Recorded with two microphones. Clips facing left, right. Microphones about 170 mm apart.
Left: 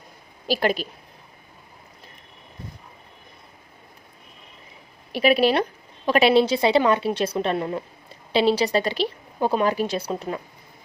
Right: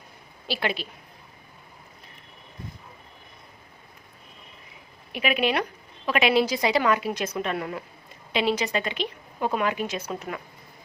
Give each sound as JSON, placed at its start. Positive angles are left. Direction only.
{"t": 0.4, "sound": "a woman's voice", "side_deg": 40}
{"t": 5.1, "sound": "a woman's voice", "side_deg": 35}